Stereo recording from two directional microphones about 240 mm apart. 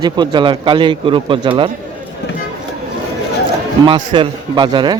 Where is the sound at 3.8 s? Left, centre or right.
Centre.